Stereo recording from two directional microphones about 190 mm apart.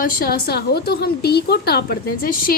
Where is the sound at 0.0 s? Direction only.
50° left (ahead or behind).